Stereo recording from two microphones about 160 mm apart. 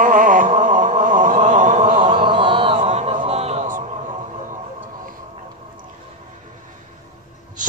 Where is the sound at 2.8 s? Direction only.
40° right (ahead or behind).